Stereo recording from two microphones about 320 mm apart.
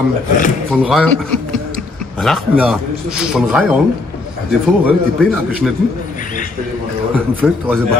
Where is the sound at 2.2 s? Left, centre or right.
Centre.